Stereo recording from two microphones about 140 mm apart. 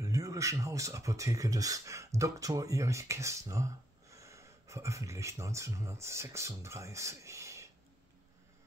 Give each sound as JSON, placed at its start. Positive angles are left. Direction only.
{"t": 0.0, "sound": "speech", "side_deg": -25}